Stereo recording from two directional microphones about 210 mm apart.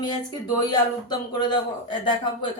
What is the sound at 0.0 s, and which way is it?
Speech, 20° left (ahead or behind).